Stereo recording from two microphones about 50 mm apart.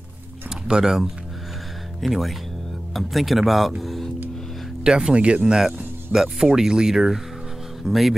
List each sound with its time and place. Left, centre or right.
0.7 s speech: centre
4.8 s speech: centre